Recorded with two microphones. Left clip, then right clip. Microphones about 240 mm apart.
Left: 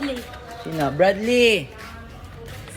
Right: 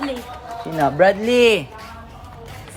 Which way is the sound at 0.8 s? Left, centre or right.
Right.